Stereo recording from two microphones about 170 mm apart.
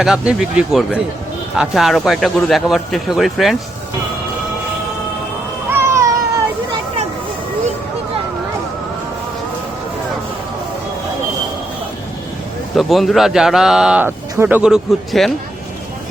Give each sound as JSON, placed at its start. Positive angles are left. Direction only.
{"t": 0.0, "sound": "a man's voice", "side_deg": -5}
{"t": 5.7, "sound": "a sound", "side_deg": -15}
{"t": 12.7, "sound": "a man's voice", "side_deg": 0}